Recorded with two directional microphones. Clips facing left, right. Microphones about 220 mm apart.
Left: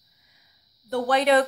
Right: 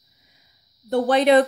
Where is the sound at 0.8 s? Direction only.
25° right (ahead or behind).